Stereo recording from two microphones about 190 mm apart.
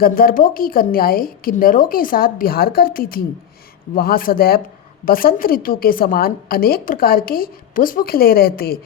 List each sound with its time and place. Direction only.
0.0 s a woman's voice: 50° left (ahead or behind)